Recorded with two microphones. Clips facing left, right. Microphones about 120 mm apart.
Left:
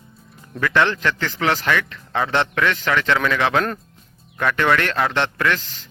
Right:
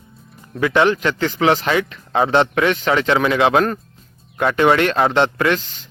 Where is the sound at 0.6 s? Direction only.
20° right (ahead or behind).